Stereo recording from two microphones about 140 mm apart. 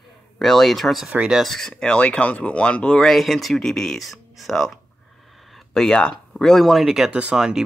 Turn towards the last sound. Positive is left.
turn(degrees=-5)  # may be behind; listen again after turning